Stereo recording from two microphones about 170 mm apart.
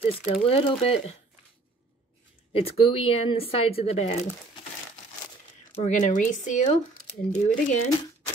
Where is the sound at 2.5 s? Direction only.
35° left (ahead or behind).